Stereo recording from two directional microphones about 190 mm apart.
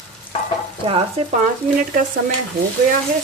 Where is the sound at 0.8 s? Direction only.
30° right (ahead or behind).